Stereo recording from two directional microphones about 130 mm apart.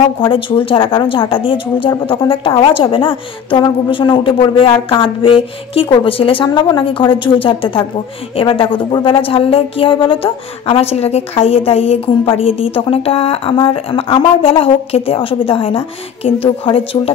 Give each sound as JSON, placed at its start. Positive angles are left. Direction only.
{"t": 0.0, "sound": "a woman's voice", "side_deg": 40}